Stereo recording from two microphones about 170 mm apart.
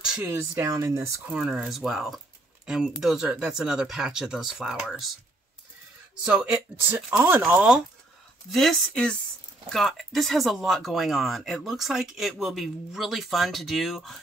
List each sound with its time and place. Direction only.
0.0 s a sound: 5° right (ahead or behind)
0.3 s speech: 20° right (ahead or behind)
1.3 s speech: 5° right (ahead or behind)
6.2 s speech: 5° right (ahead or behind)